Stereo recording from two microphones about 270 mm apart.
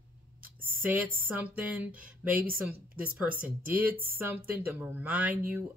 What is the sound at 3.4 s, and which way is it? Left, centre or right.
Speech, centre.